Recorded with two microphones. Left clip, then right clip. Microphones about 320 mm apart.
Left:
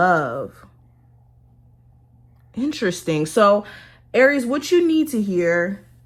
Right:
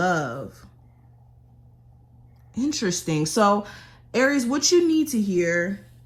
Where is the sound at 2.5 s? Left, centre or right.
Centre.